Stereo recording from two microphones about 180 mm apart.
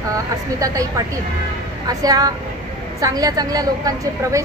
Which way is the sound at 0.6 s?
20° right (ahead or behind).